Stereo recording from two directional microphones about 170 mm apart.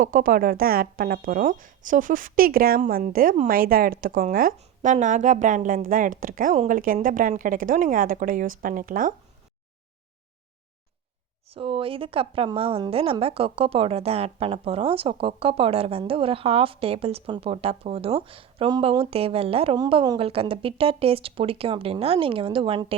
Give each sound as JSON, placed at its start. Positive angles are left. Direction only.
{"t": 0.0, "sound": "a woman's voice", "side_deg": -55}
{"t": 11.5, "sound": "a woman's voice", "side_deg": -30}